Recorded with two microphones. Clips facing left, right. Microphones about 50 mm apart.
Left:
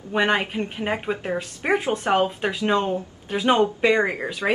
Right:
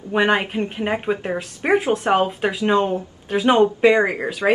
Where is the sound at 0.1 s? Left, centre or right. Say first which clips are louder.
Right 3 dB; centre.